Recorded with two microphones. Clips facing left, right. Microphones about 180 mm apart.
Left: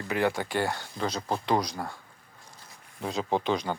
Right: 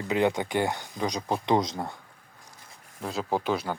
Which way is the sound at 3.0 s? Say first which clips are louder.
Even; centre (ahead or behind).